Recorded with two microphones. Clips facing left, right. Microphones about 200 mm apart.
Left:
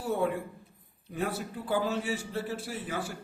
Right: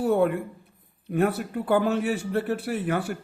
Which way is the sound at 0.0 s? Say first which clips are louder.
Right 8 dB; 60° right (ahead or behind).